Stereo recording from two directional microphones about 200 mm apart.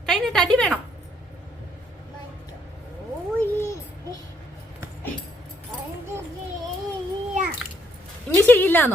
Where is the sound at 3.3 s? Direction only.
15° left (ahead or behind).